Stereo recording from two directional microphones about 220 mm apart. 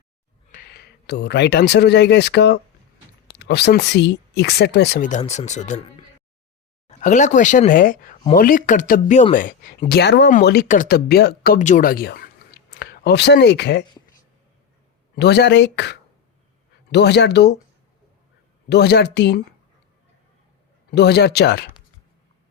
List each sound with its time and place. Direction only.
0.5 s speech: 45° left (ahead or behind)
5.0 s speech: 35° left (ahead or behind)
6.8 s speech: 35° left (ahead or behind); by 13.8 s 50° left (ahead or behind)
15.1 s speech: 50° left (ahead or behind)
18.7 s speech: 50° left (ahead or behind)
20.9 s speech: 50° left (ahead or behind)